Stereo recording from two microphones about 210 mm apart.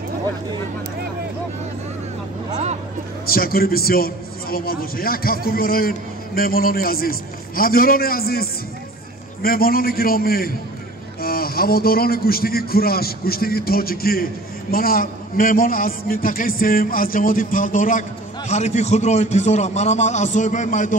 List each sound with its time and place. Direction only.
2.5 s vehicle: 30° right (ahead or behind)
3.3 s a man's voice: 45° left (ahead or behind)